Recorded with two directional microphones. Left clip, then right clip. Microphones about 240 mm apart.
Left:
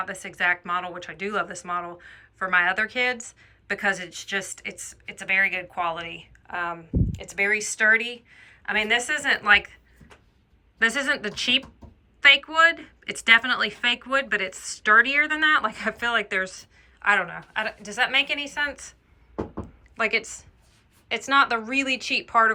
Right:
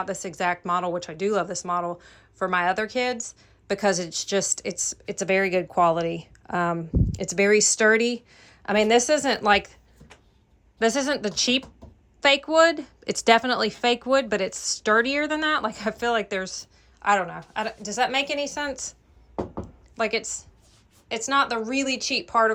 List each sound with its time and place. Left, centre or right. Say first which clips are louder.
0.0 s speech: left 1 dB; centre
10.8 s a woman's voice: even; centre
19.6 s a sound: left 2 dB; centre
21.1 s a woman's voice: left 2 dB; centre